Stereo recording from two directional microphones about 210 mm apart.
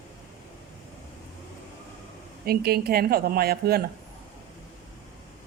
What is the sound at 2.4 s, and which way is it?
Speech, 50° right (ahead or behind).